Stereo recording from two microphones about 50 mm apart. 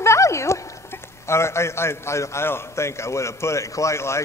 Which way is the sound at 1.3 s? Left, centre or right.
Left.